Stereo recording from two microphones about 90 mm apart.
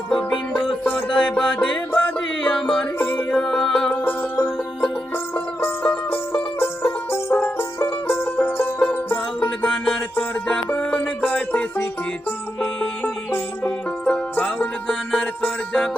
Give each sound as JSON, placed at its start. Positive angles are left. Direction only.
{"t": 0.1, "sound": "music", "side_deg": 10}
{"t": 2.6, "sound": "music", "side_deg": 5}
{"t": 3.1, "sound": "music", "side_deg": 20}
{"t": 3.3, "sound": "music", "side_deg": 5}
{"t": 4.0, "sound": "banjo", "side_deg": 20}
{"t": 5.5, "sound": "music", "side_deg": 20}
{"t": 13.7, "sound": "music", "side_deg": 15}